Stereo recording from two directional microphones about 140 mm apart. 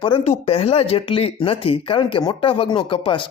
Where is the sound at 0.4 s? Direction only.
45° left (ahead or behind).